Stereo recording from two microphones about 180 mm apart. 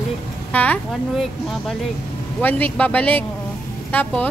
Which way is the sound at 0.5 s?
5° left (ahead or behind).